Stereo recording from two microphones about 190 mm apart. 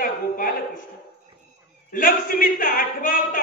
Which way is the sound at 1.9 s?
45° left (ahead or behind).